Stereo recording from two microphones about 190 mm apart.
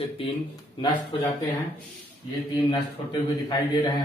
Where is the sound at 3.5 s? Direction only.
25° left (ahead or behind).